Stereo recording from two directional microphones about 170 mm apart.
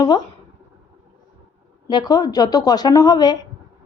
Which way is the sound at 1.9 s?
25° left (ahead or behind).